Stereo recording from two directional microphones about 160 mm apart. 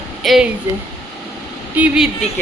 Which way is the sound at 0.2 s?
Centre (ahead or behind).